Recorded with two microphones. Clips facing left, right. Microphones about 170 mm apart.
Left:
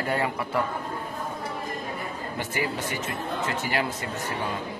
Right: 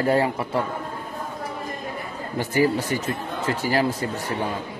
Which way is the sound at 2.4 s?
35° right (ahead or behind).